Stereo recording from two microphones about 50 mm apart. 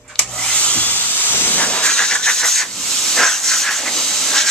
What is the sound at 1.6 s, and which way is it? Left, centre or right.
Hiss, centre.